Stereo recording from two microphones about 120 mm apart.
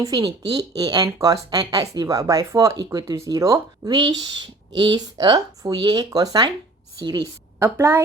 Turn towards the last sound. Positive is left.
turn(degrees=-20)  # may be behind; listen again after turning